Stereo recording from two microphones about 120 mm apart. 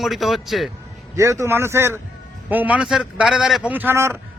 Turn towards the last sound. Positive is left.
turn(degrees=-20)  # may be behind; listen again after turning